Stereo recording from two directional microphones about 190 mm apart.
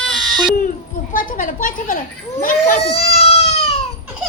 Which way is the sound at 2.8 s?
35° left (ahead or behind).